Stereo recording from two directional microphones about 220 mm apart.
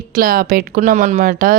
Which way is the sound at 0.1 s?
40° right (ahead or behind).